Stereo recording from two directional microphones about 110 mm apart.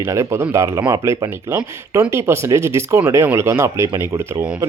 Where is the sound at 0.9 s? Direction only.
35° right (ahead or behind).